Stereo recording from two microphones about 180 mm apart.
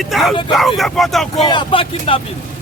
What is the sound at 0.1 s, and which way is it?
Speech, centre (ahead or behind).